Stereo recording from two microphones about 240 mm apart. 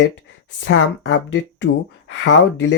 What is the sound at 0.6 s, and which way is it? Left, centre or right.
Speech, left.